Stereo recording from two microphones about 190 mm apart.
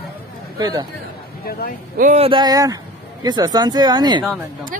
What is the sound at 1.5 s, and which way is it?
Speech, 50° left (ahead or behind).